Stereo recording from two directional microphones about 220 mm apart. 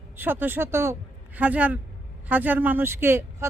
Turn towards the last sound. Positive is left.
turn(degrees=-10)  # may be behind; listen again after turning